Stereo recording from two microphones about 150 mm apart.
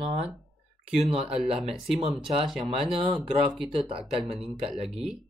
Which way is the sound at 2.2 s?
35° right (ahead or behind).